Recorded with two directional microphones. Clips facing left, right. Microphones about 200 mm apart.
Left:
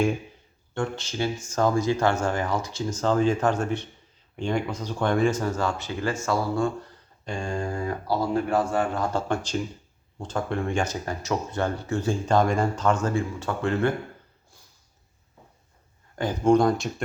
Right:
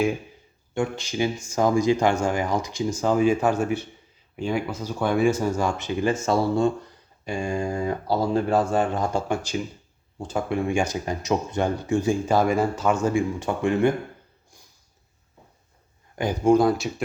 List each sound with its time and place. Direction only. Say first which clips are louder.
0.7 s speech: right 3 dB; 10° right (ahead or behind)
7.3 s speech: right 3 dB; 10° right (ahead or behind)
9.1 s speech: right 1 dB; 10° right (ahead or behind)
16.1 s speech: right 1 dB; 10° right (ahead or behind)